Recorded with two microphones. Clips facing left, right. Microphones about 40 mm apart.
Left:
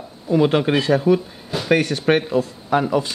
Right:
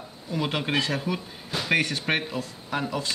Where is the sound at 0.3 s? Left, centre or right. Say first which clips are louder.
Left 10 dB; centre.